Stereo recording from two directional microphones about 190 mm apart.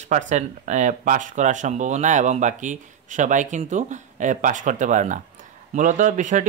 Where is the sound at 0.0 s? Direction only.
40° right (ahead or behind).